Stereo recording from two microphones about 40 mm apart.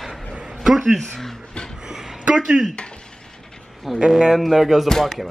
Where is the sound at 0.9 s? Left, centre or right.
Centre.